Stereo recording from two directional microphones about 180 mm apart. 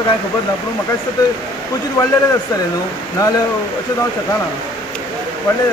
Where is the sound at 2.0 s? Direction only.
20° left (ahead or behind).